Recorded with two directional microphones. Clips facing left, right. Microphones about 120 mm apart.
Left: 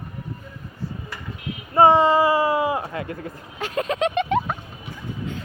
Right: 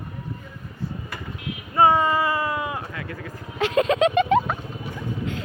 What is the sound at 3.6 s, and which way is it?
Speech, 90° right.